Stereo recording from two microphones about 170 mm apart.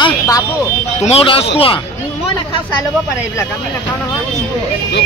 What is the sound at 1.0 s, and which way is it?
Speech, 35° left (ahead or behind).